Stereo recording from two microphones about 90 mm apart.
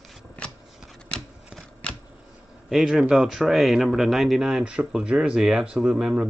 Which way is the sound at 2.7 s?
5° right (ahead or behind).